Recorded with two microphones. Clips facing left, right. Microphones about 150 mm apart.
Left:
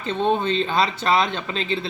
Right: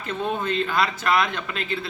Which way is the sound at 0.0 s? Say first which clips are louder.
Left 5 dB; 30° left (ahead or behind).